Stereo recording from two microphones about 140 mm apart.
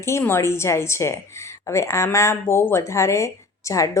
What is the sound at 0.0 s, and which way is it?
Speech, 20° left (ahead or behind).